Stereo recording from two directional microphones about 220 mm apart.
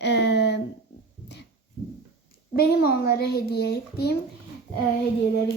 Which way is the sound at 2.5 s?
45° left (ahead or behind).